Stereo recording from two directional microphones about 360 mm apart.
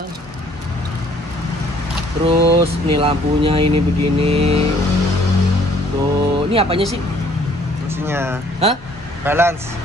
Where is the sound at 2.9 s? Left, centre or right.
Centre.